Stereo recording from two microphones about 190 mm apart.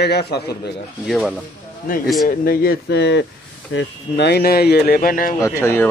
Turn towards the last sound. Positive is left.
turn(degrees=15)  # may be behind; listen again after turning